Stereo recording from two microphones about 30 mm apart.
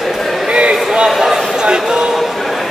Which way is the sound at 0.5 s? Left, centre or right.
Right.